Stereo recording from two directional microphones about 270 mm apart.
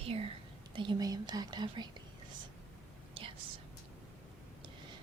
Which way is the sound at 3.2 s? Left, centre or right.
Centre.